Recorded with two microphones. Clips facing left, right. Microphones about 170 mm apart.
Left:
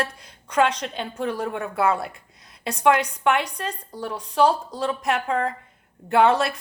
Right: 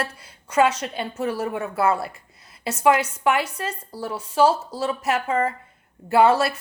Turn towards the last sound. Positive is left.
turn(degrees=-5)  # may be behind; listen again after turning